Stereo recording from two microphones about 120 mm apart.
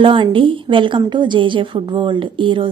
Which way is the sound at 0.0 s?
45° right (ahead or behind).